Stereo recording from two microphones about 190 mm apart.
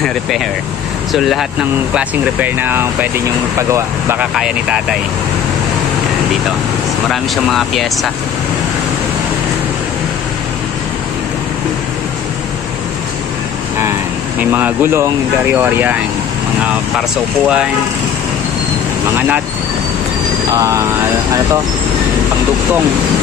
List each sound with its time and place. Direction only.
1.1 s speech: centre (ahead or behind)
7.1 s speech: centre (ahead or behind)
14.4 s speech: 10° right (ahead or behind)
19.1 s speech: 10° right (ahead or behind)
20.5 s speech: 20° right (ahead or behind)